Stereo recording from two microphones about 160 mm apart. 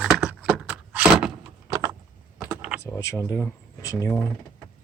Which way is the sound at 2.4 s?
5° right (ahead or behind).